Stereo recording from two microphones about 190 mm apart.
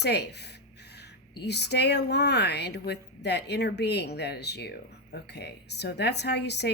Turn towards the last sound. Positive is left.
turn(degrees=60)  # may be behind; listen again after turning